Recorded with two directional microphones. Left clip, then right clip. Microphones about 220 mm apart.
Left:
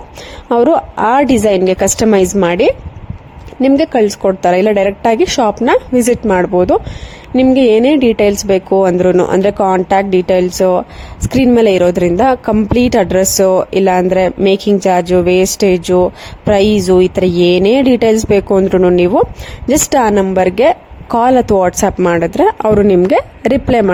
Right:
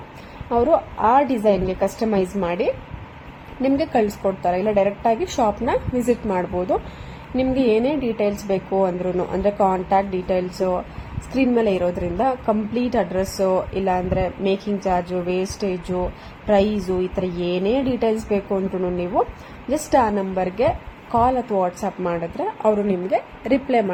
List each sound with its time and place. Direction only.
0.5 s a woman's voice: 40° left (ahead or behind)